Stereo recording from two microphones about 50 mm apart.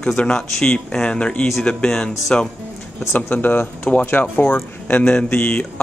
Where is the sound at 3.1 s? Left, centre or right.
Left.